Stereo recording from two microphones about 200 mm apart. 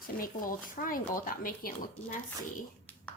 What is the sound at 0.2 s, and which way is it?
A woman's voice, 45° left (ahead or behind).